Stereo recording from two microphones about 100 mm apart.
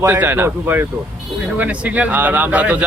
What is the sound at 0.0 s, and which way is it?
Speech, 20° right (ahead or behind).